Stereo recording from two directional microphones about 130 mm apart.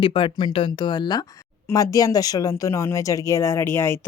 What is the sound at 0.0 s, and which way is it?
Speech, 40° left (ahead or behind).